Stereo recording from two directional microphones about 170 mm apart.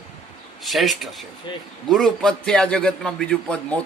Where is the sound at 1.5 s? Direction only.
25° left (ahead or behind).